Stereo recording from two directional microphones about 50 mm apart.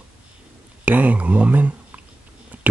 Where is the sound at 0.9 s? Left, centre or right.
Right.